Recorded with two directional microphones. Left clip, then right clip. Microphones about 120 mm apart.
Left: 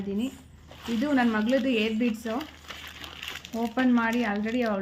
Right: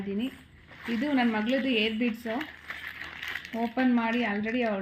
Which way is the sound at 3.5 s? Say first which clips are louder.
Left 2 dB; 25° right (ahead or behind).